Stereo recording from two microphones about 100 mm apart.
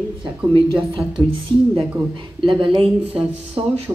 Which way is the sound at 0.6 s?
60° right (ahead or behind).